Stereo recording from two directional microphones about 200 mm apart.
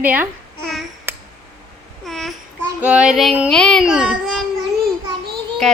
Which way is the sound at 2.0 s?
Centre (ahead or behind).